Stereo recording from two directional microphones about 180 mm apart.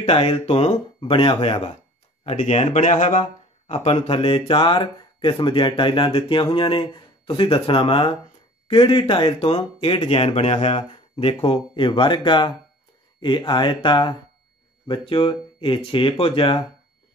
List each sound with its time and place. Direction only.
0.0 s speech: 35° left (ahead or behind)
3.7 s speech: 30° left (ahead or behind)